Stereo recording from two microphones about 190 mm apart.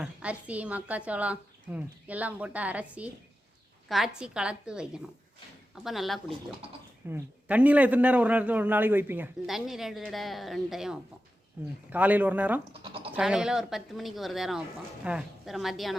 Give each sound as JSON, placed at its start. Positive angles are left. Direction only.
{"t": 0.0, "sound": "a man's voice", "side_deg": -5}